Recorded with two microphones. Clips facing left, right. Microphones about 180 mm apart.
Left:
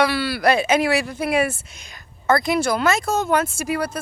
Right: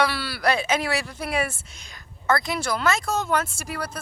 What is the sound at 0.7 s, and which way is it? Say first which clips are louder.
Speech: left 6 dB; 10° left (ahead or behind).